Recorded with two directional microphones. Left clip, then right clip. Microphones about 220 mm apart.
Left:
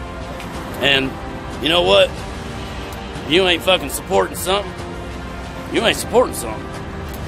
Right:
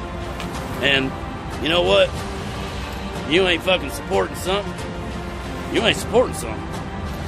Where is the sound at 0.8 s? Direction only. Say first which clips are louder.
Left 3 dB; 15° left (ahead or behind).